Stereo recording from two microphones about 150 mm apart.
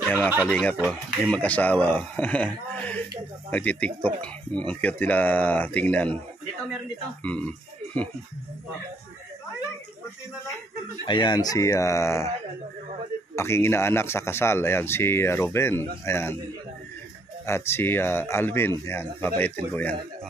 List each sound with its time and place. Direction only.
0.5 s speech: 10° left (ahead or behind)
7.2 s speech: 10° left (ahead or behind)
11.1 s speech: 30° left (ahead or behind)
13.4 s speech: 15° left (ahead or behind)
17.5 s speech: 15° left (ahead or behind)